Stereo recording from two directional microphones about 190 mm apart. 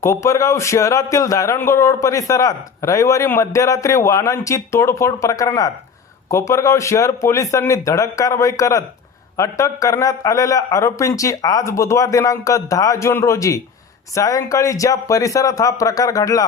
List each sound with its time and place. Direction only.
0.0 s a man's voice: 15° left (ahead or behind)